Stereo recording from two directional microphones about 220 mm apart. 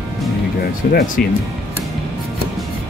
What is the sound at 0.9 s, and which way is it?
Speech, 45° left (ahead or behind).